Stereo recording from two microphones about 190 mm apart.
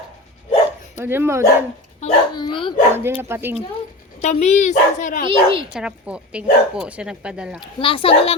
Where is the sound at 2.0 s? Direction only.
35° left (ahead or behind).